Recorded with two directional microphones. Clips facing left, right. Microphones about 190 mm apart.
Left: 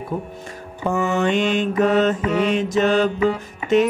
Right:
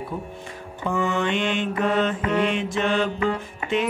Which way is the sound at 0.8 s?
45° left (ahead or behind).